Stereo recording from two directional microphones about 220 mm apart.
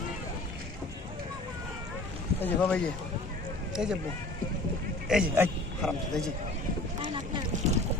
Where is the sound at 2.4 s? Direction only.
5° left (ahead or behind).